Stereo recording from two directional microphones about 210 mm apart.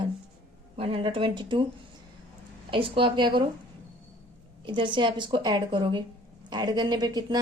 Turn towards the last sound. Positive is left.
turn(degrees=-20)  # may be behind; listen again after turning